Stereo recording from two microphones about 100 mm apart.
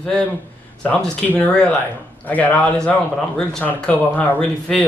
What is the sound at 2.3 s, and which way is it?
Speech, 15° left (ahead or behind).